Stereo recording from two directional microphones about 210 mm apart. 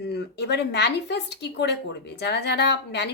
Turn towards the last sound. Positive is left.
turn(degrees=55)  # may be behind; listen again after turning